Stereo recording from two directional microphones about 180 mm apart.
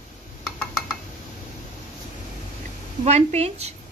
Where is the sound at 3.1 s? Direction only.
35° right (ahead or behind).